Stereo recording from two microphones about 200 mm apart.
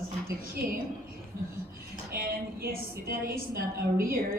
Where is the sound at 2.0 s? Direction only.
50° right (ahead or behind).